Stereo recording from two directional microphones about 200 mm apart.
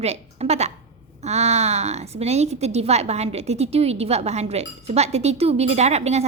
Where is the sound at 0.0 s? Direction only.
30° right (ahead or behind).